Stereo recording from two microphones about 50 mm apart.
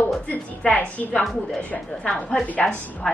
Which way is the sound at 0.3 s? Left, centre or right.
Left.